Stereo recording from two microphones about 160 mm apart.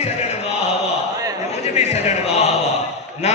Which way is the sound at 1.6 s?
45° left (ahead or behind).